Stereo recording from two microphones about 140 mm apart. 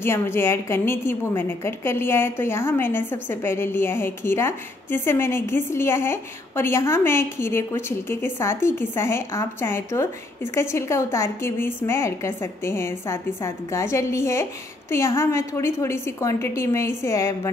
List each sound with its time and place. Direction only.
0.0 s a woman's voice: 15° left (ahead or behind)